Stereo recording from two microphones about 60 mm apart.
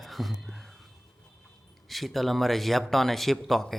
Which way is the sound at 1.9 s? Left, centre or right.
Centre.